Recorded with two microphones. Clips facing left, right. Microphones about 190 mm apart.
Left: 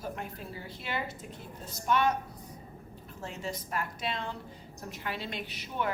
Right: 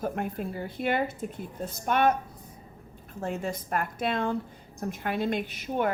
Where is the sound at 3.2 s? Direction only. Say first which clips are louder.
Right 7 dB; 55° right (ahead or behind).